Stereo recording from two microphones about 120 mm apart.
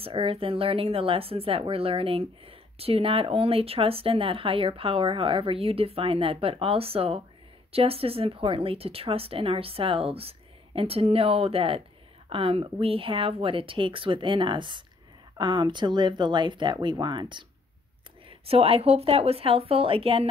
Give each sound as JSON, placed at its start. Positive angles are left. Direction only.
{"t": 0.0, "sound": "speech", "side_deg": -50}
{"t": 18.4, "sound": "speech", "side_deg": -55}